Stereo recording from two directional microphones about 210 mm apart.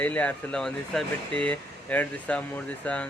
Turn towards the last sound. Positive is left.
turn(degrees=5)  # may be behind; listen again after turning